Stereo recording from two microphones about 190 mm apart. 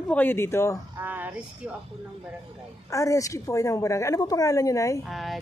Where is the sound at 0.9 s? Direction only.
10° right (ahead or behind).